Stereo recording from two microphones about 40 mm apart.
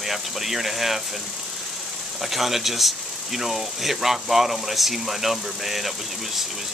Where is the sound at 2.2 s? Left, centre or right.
Centre.